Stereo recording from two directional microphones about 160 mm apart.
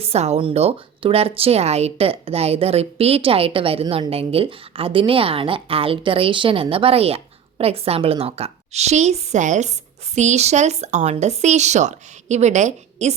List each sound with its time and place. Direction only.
0.0 s speech: 40° right (ahead or behind)